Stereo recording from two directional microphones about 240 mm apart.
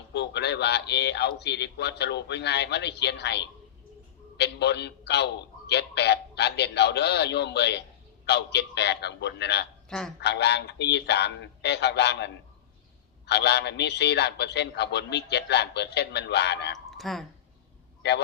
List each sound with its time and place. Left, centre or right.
0.1 s a man's voice: left
17.0 s speech: centre
18.0 s a man's voice: left